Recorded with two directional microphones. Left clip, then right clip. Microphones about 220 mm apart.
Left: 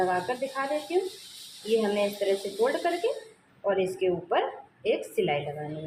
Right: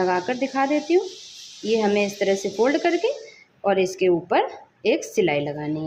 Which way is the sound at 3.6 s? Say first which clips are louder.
Right 6 dB; 50° right (ahead or behind).